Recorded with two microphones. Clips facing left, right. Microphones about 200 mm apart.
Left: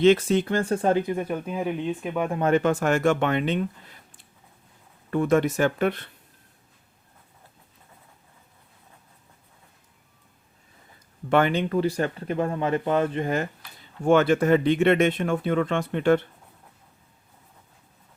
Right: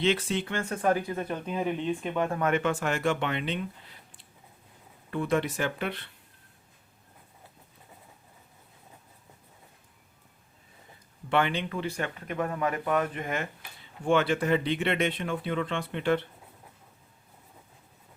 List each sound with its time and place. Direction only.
0.0 s speech: 45° left (ahead or behind); by 2.4 s 10° left (ahead or behind)
2.4 s speech: 35° left (ahead or behind)
5.1 s speech: 45° left (ahead or behind)
11.3 s speech: 45° left (ahead or behind)
14.0 s speech: 45° left (ahead or behind)